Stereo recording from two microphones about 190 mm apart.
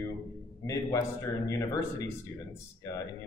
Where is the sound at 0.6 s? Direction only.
15° left (ahead or behind).